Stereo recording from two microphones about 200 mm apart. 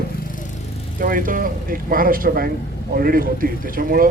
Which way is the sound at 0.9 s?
45° right (ahead or behind).